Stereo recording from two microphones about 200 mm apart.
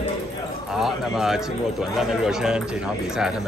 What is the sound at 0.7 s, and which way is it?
Speech, centre (ahead or behind).